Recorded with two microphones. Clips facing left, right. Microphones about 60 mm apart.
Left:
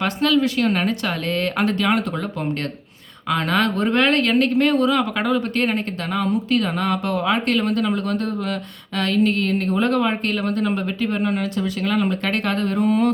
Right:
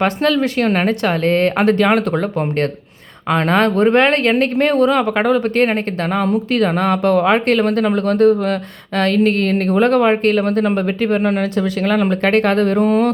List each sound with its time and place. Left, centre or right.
0.0 s speech: right